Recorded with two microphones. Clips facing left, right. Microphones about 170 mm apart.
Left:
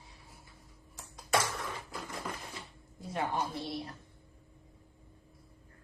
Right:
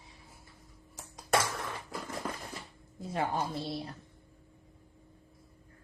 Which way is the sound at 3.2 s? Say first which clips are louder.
Right 1 dB; 30° right (ahead or behind).